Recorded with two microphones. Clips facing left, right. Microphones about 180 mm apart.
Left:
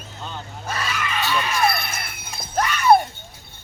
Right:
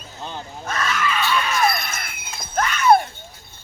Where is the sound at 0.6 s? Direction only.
10° left (ahead or behind); by 2.4 s 30° left (ahead or behind).